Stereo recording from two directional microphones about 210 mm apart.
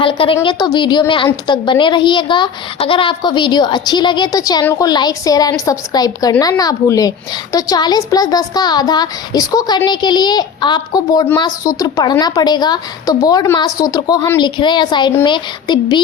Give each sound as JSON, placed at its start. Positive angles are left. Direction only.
{"t": 0.0, "sound": "a child's voice", "side_deg": 25}